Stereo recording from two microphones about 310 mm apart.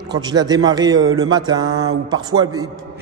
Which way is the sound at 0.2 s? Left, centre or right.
Centre.